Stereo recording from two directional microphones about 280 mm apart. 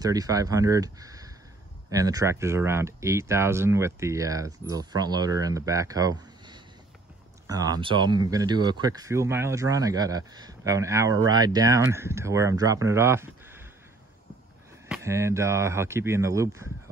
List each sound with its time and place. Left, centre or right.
0.0 s speech: centre
14.9 s speech: centre